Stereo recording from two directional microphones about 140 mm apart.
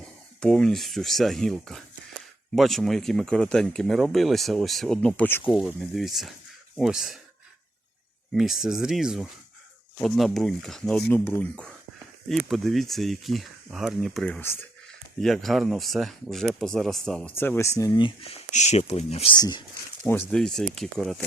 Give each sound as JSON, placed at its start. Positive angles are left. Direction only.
{"t": 0.3, "sound": "speech", "side_deg": 5}
{"t": 5.5, "sound": "speech", "side_deg": 0}
{"t": 8.3, "sound": "speech", "side_deg": 0}
{"t": 18.5, "sound": "speech", "side_deg": 55}
{"t": 19.4, "sound": "speech", "side_deg": 30}
{"t": 20.3, "sound": "speech", "side_deg": 5}